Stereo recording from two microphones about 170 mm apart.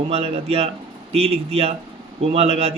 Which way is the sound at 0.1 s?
35° right (ahead or behind).